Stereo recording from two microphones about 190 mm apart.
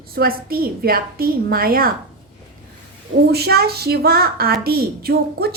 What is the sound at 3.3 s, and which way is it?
A woman's voice, 55° right (ahead or behind).